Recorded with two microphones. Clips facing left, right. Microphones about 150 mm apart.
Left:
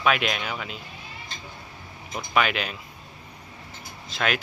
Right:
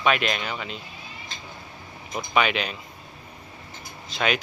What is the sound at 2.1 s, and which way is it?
Speech, centre (ahead or behind).